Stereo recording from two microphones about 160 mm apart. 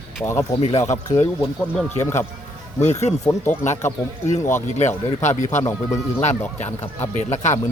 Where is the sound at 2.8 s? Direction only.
45° left (ahead or behind).